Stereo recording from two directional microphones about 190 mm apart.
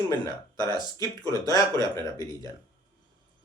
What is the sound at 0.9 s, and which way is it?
Speech, 15° left (ahead or behind).